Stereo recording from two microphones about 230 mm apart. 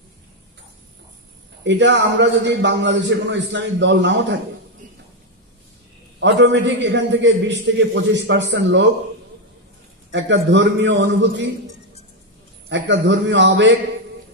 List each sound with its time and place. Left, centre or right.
1.6 s a man's voice: right
6.1 s a man's voice: right
10.1 s a man's voice: right
12.6 s a man's voice: right